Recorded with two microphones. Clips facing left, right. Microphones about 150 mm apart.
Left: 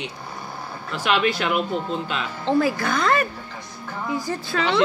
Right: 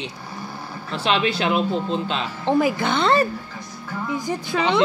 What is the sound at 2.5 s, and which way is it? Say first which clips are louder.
A woman's voice: right 1 dB; 15° right (ahead or behind).